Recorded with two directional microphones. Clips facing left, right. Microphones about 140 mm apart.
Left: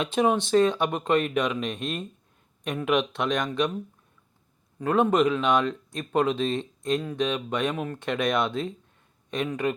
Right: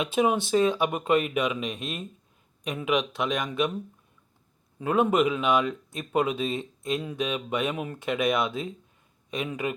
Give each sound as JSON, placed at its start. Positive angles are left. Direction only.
{"t": 0.0, "sound": "speech", "side_deg": -5}
{"t": 4.8, "sound": "speech", "side_deg": -10}